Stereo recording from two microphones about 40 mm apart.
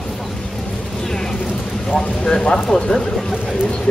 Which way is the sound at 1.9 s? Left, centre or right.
Left.